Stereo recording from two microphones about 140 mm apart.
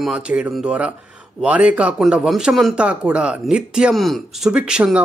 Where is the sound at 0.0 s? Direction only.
5° right (ahead or behind).